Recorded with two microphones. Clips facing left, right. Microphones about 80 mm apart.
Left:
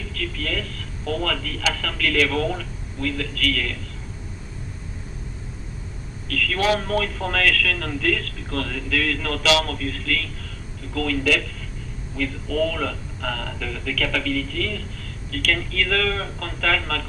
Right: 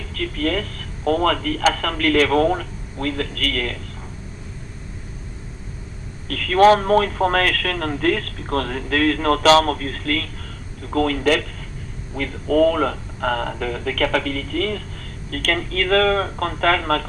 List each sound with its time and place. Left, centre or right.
0.1 s speech: right
6.2 s speech: right